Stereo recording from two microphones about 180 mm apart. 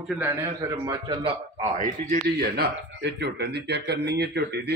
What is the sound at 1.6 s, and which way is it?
Speech, 40° right (ahead or behind).